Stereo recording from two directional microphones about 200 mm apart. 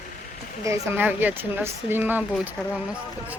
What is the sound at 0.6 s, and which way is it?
Speech, 15° right (ahead or behind).